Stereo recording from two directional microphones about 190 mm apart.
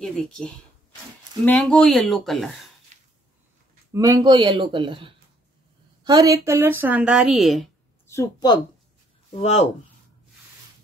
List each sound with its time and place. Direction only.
0.0 s speech: 5° left (ahead or behind)
3.9 s a woman's voice: 20° right (ahead or behind); by 7.7 s centre (ahead or behind)
8.1 s speech: 20° left (ahead or behind)
9.3 s speech: 35° left (ahead or behind)